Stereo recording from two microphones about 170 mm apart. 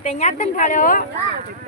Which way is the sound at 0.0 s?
40° left (ahead or behind).